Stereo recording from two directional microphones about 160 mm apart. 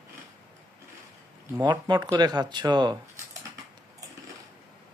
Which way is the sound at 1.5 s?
25° right (ahead or behind).